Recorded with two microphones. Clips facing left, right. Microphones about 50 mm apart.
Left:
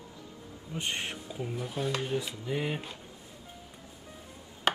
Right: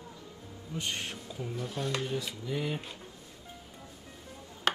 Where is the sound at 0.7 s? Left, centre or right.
Left.